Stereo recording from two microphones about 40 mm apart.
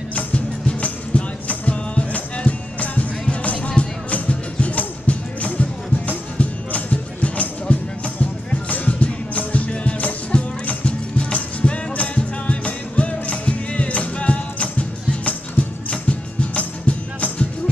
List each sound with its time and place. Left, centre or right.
0.1 s music: left